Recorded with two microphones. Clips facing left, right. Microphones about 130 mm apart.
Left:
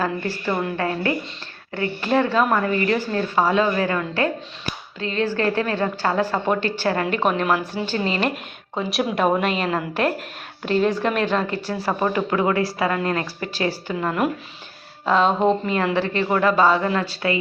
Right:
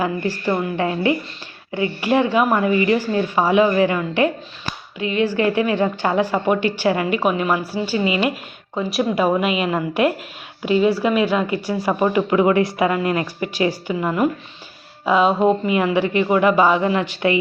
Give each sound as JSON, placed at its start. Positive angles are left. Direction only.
{"t": 0.0, "sound": "a woman's voice", "side_deg": -15}